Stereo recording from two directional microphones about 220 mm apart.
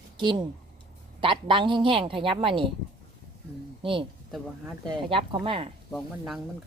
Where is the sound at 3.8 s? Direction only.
25° right (ahead or behind).